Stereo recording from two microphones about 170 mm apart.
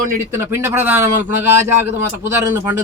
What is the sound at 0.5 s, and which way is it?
A man's voice, 15° right (ahead or behind).